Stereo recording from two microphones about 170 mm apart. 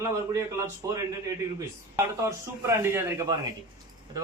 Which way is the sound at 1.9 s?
20° right (ahead or behind).